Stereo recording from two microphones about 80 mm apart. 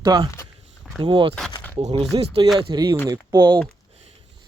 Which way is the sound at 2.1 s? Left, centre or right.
Right.